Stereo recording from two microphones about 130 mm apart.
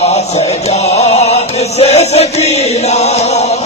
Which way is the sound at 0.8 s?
55° left (ahead or behind).